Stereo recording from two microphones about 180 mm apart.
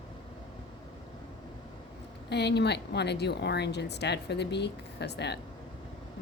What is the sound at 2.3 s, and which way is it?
Speech, 70° left (ahead or behind).